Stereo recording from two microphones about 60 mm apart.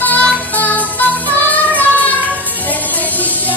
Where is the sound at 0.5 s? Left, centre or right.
Left.